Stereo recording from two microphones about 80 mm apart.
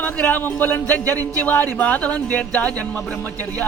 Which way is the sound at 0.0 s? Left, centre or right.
Left.